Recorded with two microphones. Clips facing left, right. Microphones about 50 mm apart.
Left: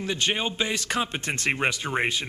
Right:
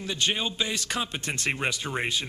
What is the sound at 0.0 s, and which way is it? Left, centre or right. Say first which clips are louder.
A man's voice: left 2 dB; left.